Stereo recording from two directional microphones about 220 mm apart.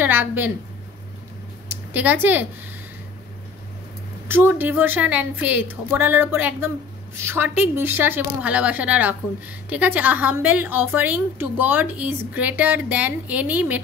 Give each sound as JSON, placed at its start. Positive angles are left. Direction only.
{"t": 0.0, "sound": "a woman's voice", "side_deg": -10}
{"t": 1.7, "sound": "speech", "side_deg": -10}
{"t": 4.3, "sound": "a woman's voice", "side_deg": -10}